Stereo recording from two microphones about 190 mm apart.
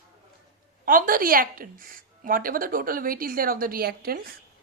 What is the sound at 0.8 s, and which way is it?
A woman's voice, 45° right (ahead or behind).